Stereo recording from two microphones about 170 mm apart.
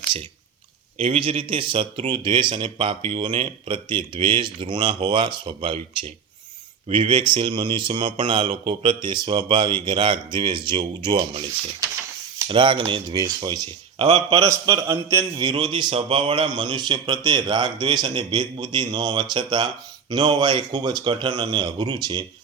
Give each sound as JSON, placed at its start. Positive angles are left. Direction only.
{"t": 0.9, "sound": "a man's voice", "side_deg": -30}
{"t": 12.5, "sound": "a man's voice", "side_deg": -25}
{"t": 14.0, "sound": "speech", "side_deg": -35}
{"t": 14.3, "sound": "a man's voice", "side_deg": -20}